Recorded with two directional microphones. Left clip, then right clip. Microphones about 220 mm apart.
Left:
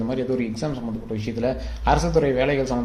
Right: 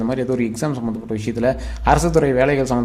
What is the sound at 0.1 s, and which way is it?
Speech, 25° right (ahead or behind).